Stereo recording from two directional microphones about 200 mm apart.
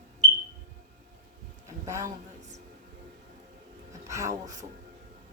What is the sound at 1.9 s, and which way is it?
Speech, 15° right (ahead or behind).